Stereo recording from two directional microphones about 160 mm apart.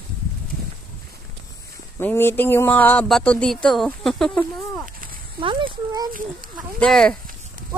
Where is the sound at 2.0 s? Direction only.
15° left (ahead or behind).